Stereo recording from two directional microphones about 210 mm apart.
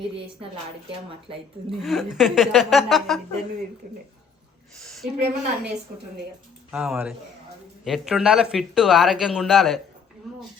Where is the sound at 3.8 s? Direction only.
40° right (ahead or behind).